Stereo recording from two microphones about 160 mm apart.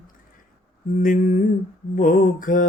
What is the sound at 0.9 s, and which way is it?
Mantra, 55° left (ahead or behind).